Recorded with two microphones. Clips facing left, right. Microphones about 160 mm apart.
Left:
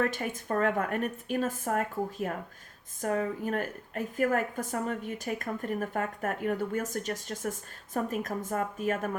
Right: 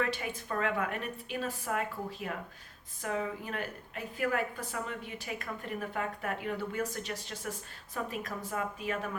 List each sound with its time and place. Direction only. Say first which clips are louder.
0.0 s a woman's voice: left 4 dB; 45° left (ahead or behind)